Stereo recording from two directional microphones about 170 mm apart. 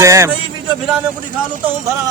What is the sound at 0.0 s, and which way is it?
Speech, 15° right (ahead or behind).